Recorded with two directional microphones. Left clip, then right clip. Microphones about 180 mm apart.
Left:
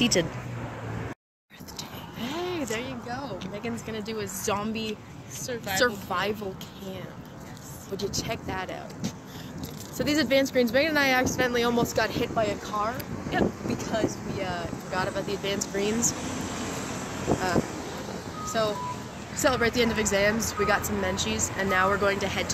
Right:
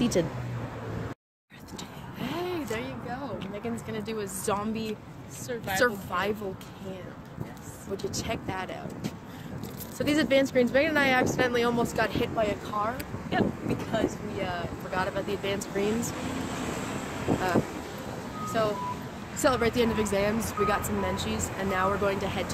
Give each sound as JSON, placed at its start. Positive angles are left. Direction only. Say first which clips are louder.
{"t": 0.0, "sound": "speech", "louder": "left 3 dB", "side_deg": -10}
{"t": 2.1, "sound": "a sound", "louder": "left 1 dB", "side_deg": 25}
{"t": 3.9, "sound": "speech", "louder": "left 1 dB", "side_deg": 10}
{"t": 8.0, "sound": "speech", "louder": "left 3 dB", "side_deg": 10}
{"t": 9.9, "sound": "speech", "louder": "left 1 dB", "side_deg": 10}
{"t": 13.3, "sound": "speech", "louder": "left 1 dB", "side_deg": -30}
{"t": 13.9, "sound": "speech", "louder": "left 1 dB", "side_deg": 10}
{"t": 18.5, "sound": "a woman's voice", "louder": "left 1 dB", "side_deg": 0}